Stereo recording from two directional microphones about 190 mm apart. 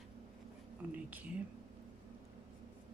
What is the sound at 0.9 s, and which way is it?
Speech, 10° right (ahead or behind).